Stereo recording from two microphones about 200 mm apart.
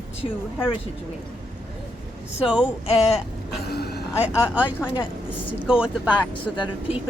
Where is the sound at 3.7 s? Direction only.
55° left (ahead or behind).